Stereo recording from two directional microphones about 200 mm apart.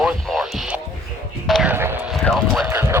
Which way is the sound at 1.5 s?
Centre (ahead or behind).